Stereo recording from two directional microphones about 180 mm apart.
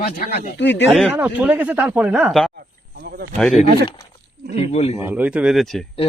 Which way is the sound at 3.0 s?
60° right (ahead or behind).